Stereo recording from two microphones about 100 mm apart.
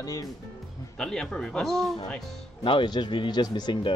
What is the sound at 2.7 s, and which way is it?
Speech, 50° left (ahead or behind).